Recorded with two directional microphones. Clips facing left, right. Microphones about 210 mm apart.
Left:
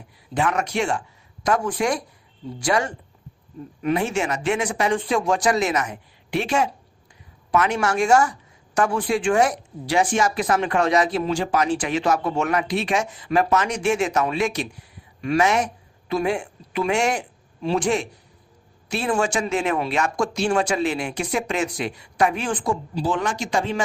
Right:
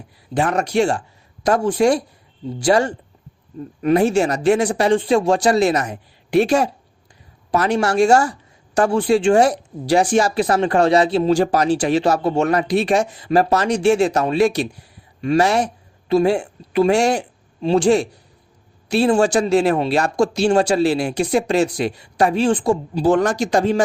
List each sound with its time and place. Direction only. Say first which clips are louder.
0.3 s speech: right 5 dB; 35° right (ahead or behind)
23.0 s speech: right 10 dB; 45° right (ahead or behind)